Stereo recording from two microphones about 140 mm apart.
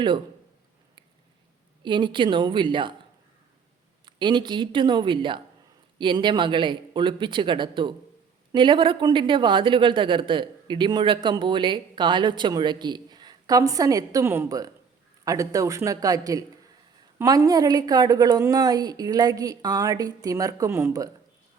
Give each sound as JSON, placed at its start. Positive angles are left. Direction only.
{"t": 1.8, "sound": "speech", "side_deg": -35}
{"t": 4.0, "sound": "a woman's voice", "side_deg": -35}